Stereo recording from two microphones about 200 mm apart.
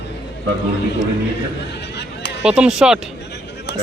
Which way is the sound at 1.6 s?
60° left (ahead or behind).